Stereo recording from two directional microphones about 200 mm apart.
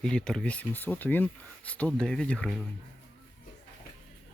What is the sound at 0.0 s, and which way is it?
Speech, 5° left (ahead or behind).